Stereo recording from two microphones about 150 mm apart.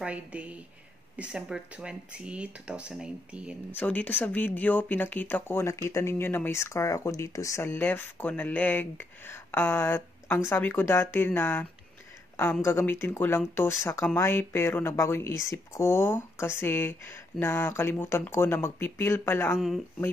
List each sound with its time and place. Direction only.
0.0 s speech: 10° right (ahead or behind)
3.8 s speech: 10° left (ahead or behind)
12.6 s speech: 15° left (ahead or behind)